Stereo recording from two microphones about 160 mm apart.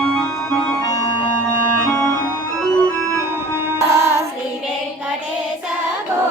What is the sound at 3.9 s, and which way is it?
Music, 20° right (ahead or behind).